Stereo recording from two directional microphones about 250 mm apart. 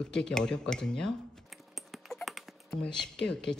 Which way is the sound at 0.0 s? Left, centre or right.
Centre.